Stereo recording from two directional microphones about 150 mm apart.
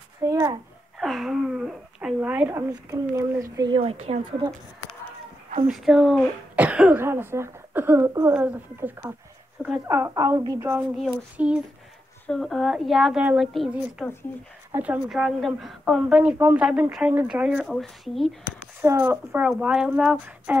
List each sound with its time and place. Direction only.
0.2 s a child's voice: 25° right (ahead or behind)
0.9 s speech: centre (ahead or behind); by 3.8 s 25° right (ahead or behind)
3.8 s speech: 45° right (ahead or behind)
5.7 s a woman's voice: 5° right (ahead or behind); by 10.8 s 20° right (ahead or behind)
11.3 s a woman's voice: 10° right (ahead or behind)
18.8 s a woman's voice: 15° right (ahead or behind)